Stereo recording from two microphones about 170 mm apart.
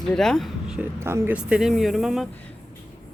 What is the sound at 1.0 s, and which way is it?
Speech, 15° right (ahead or behind).